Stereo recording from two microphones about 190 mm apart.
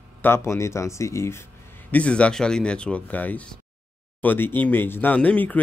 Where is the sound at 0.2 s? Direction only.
15° left (ahead or behind).